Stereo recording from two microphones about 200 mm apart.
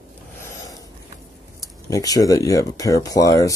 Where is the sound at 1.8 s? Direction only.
15° left (ahead or behind).